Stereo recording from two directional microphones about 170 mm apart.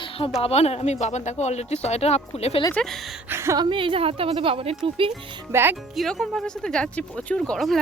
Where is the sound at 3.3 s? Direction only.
15° right (ahead or behind).